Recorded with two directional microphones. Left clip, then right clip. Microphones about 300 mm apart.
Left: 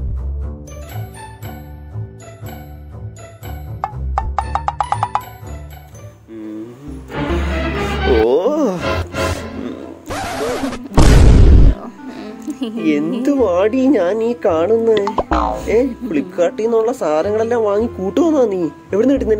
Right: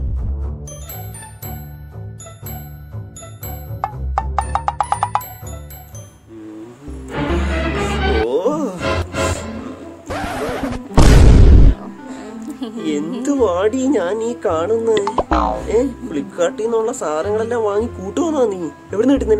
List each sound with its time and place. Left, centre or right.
3.8 s music: centre
7.1 s music: centre
8.3 s music: left
8.7 s music: centre
12.2 s music: centre
12.8 s speech: centre
15.0 s speech: centre
15.7 s speech: centre
17.8 s speech: centre
18.1 s speech: centre